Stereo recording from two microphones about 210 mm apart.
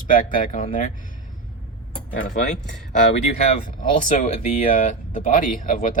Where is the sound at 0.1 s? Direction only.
40° left (ahead or behind).